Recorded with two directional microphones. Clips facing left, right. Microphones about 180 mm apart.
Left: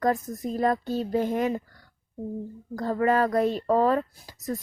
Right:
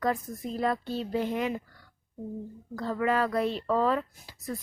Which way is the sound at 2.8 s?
45° left (ahead or behind).